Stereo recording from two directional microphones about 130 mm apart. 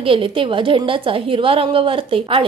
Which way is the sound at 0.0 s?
45° right (ahead or behind).